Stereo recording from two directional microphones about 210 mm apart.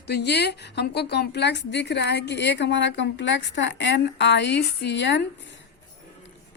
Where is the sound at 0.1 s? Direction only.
55° left (ahead or behind).